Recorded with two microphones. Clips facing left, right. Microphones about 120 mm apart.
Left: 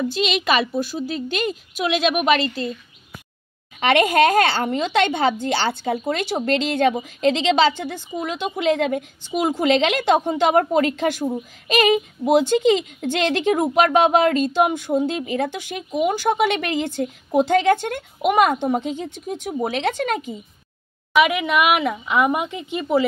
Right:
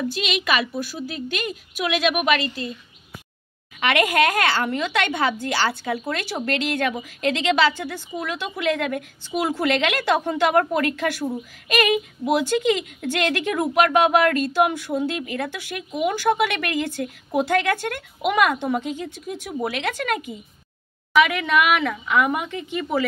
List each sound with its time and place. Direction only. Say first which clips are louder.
0.1 s a woman's voice: left 3 dB; 30° left (ahead or behind)
3.8 s speech: left 4 dB; 30° left (ahead or behind)
21.1 s speech: left 1 dB; 15° left (ahead or behind)